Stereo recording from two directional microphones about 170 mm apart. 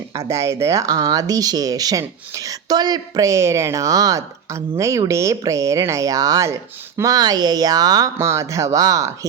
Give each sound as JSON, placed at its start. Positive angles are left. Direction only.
{"t": 0.1, "sound": "speech", "side_deg": -15}